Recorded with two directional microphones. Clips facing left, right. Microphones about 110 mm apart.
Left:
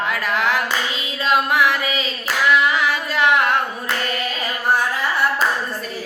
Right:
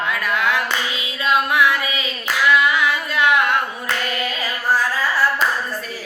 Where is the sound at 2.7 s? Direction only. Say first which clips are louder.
Even; 35° left (ahead or behind).